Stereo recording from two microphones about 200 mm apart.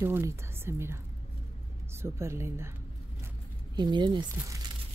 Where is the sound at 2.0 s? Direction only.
15° right (ahead or behind).